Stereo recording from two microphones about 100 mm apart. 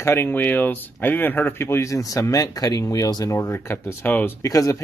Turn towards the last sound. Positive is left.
turn(degrees=35)  # may be behind; listen again after turning